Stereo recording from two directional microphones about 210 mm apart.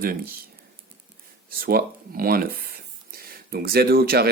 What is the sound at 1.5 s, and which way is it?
Speech, 45° right (ahead or behind).